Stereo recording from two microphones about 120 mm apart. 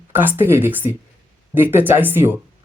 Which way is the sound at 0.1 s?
15° right (ahead or behind).